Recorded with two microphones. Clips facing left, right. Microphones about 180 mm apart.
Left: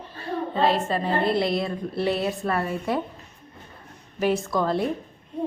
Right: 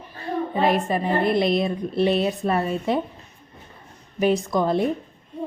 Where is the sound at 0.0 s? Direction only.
15° right (ahead or behind).